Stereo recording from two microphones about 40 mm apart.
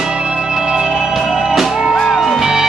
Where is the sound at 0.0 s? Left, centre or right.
Centre.